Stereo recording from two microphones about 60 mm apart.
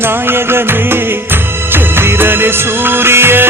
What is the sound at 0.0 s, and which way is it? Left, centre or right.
Music, right.